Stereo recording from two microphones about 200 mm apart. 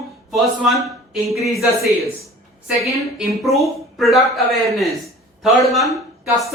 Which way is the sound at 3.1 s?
Centre (ahead or behind).